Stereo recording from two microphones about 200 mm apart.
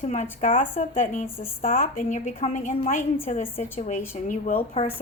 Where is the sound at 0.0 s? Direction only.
35° left (ahead or behind).